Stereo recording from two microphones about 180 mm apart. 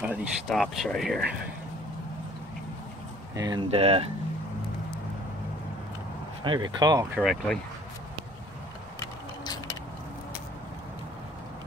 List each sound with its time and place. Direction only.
0.0 s speech: 5° right (ahead or behind)
3.3 s speech: 20° right (ahead or behind)
3.7 s speech: 35° right (ahead or behind)
6.4 s speech: 25° right (ahead or behind)
7.2 s speech: centre (ahead or behind)